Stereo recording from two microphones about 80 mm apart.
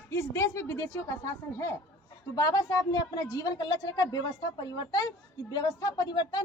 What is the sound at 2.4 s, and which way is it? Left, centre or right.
A woman's voice, left.